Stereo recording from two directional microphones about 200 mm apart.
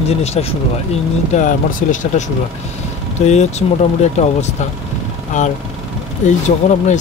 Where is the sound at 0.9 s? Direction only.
35° left (ahead or behind).